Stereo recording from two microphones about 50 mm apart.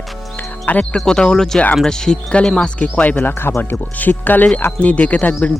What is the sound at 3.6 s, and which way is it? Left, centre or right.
Speech, left.